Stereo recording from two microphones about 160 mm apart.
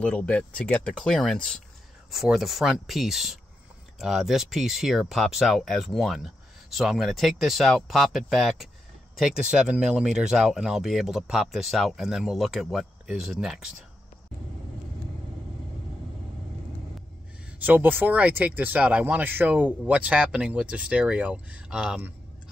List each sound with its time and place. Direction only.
0.0 s speech: 10° left (ahead or behind)
17.6 s speech: 10° right (ahead or behind)